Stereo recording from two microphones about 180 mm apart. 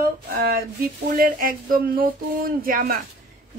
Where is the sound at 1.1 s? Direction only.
55° right (ahead or behind).